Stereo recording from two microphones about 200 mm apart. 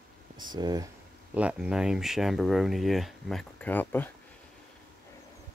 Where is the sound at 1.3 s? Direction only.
5° right (ahead or behind); by 4.1 s 10° left (ahead or behind).